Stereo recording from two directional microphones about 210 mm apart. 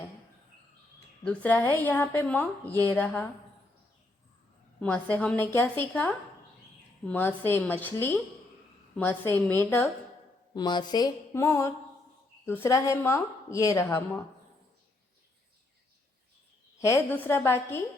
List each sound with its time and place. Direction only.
1.2 s a woman's voice: 5° left (ahead or behind)
4.8 s a woman's voice: 5° left (ahead or behind)
16.8 s a woman's voice: 10° left (ahead or behind)